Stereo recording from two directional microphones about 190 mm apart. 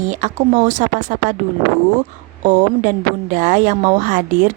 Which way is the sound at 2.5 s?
40° right (ahead or behind).